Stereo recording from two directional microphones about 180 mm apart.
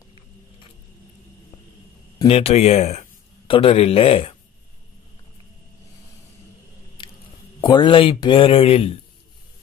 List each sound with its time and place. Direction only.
2.2 s speech: 35° left (ahead or behind)
7.0 s a sound: 25° left (ahead or behind)
7.6 s speech: 25° left (ahead or behind)